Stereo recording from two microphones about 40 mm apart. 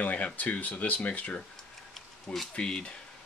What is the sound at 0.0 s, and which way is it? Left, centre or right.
Speech, left.